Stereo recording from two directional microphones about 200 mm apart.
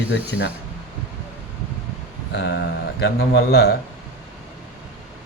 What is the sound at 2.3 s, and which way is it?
Speech, 55° left (ahead or behind).